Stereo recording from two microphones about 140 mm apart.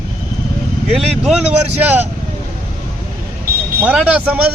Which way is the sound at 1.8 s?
15° right (ahead or behind).